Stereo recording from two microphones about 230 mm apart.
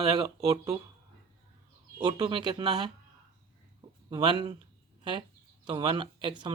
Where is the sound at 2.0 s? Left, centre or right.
Centre.